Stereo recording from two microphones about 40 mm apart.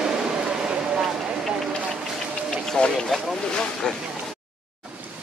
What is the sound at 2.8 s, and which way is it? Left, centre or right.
Vehicle, left.